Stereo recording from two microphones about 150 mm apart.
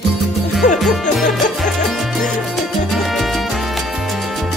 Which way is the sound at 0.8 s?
Centre (ahead or behind).